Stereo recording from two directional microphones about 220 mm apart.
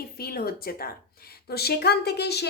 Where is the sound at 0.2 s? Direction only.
45° left (ahead or behind).